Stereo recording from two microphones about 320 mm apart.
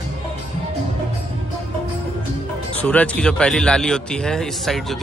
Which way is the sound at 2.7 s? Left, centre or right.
Centre.